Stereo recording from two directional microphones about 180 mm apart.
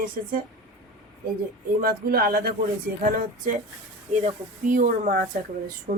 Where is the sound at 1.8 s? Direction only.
55° right (ahead or behind).